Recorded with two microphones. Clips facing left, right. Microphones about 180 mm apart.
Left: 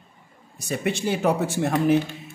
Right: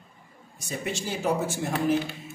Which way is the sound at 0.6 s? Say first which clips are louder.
Left 7 dB; 65° left (ahead or behind).